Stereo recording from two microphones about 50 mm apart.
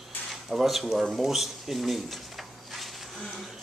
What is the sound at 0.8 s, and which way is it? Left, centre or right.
Speech, centre.